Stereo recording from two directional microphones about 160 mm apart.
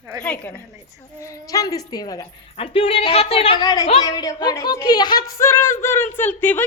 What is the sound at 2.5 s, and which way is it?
Speech, 35° left (ahead or behind).